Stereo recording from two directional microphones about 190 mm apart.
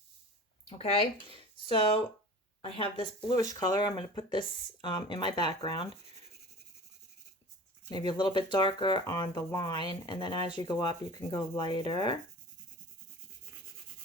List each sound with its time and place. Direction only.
0.7 s speech: 30° left (ahead or behind)
7.9 s speech: 25° left (ahead or behind)